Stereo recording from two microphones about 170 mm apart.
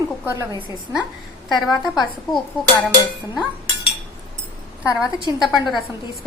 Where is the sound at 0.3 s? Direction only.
15° right (ahead or behind).